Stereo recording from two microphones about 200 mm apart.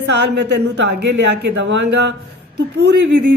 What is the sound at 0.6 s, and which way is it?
Speech, 60° right (ahead or behind).